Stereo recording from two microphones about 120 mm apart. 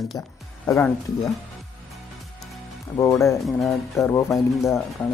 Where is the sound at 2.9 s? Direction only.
25° left (ahead or behind).